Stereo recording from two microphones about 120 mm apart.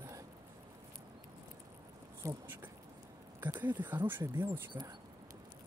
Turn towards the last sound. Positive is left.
turn(degrees=-40)  # may be behind; listen again after turning